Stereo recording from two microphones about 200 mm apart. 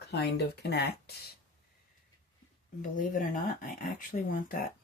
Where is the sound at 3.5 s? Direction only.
45° left (ahead or behind).